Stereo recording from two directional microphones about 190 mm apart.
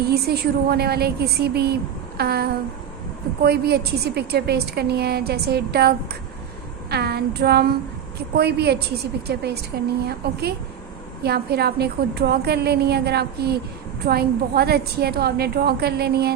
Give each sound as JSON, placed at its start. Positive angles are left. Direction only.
{"t": 0.1, "sound": "a woman's voice", "side_deg": -55}
{"t": 6.9, "sound": "a woman's voice", "side_deg": -55}